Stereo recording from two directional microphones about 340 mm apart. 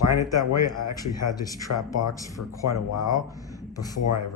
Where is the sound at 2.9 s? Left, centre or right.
Centre.